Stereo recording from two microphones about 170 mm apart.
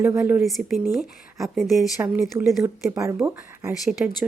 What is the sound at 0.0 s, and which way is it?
Speech, 15° right (ahead or behind).